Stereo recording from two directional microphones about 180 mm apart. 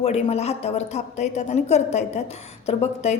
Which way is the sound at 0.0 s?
35° left (ahead or behind).